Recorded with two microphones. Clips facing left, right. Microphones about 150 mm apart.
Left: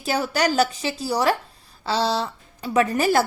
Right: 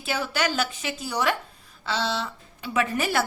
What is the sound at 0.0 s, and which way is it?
A woman's voice, 40° left (ahead or behind).